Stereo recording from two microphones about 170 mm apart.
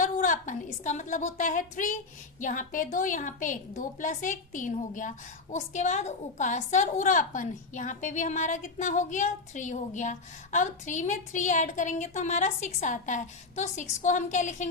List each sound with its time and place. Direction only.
0.0 s a woman's voice: 50° left (ahead or behind)